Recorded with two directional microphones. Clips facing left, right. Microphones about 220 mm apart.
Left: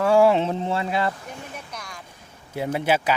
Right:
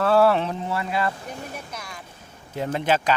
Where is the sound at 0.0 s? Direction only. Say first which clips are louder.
Left 1 dB; 15° left (ahead or behind).